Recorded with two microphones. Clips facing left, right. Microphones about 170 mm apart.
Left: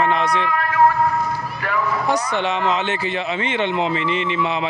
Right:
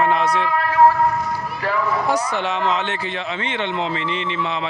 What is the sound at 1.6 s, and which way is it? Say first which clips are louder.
Speech: right 2 dB; 30° right (ahead or behind).